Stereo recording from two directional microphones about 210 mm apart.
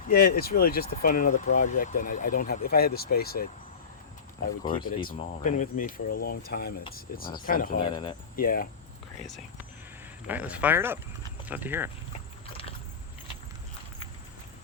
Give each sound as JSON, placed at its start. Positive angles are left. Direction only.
{"t": 0.1, "sound": "speech", "side_deg": 45}
{"t": 5.0, "sound": "speech", "side_deg": 35}
{"t": 7.8, "sound": "speech", "side_deg": 20}
{"t": 8.4, "sound": "speech", "side_deg": 40}
{"t": 10.2, "sound": "speech", "side_deg": -5}